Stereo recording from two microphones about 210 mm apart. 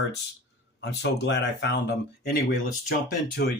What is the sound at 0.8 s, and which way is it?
Speech, 55° left (ahead or behind).